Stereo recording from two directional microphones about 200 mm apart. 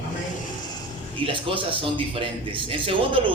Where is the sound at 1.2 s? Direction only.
25° right (ahead or behind).